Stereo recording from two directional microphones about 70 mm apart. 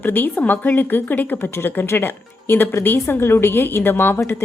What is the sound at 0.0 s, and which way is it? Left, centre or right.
A woman's voice, left.